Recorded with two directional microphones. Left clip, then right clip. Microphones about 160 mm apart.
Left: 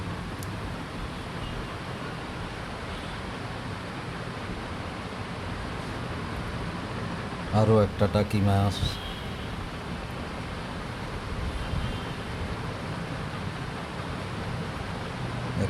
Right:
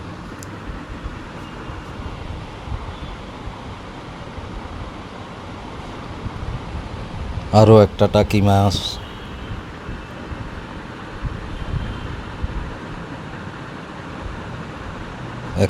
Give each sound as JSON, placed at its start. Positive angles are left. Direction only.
{"t": 7.5, "sound": "a man's voice", "side_deg": -55}